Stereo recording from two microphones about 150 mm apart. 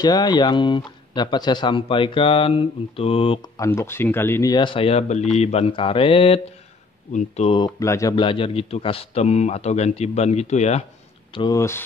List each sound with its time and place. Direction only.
0.0 s speech: 25° left (ahead or behind)
3.5 s speech: 20° left (ahead or behind)
4.5 s speech: 30° left (ahead or behind)
7.1 s speech: 50° left (ahead or behind)
7.5 s speech: 25° left (ahead or behind)
8.2 s speech: 35° left (ahead or behind)
11.3 s speech: 30° left (ahead or behind)